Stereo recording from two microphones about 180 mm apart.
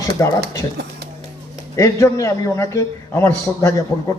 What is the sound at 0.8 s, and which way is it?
Speech, 65° right (ahead or behind).